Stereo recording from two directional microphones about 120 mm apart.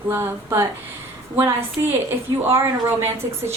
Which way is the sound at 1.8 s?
25° right (ahead or behind).